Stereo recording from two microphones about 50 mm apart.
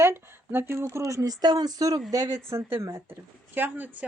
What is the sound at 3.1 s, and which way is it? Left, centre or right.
Speech, right.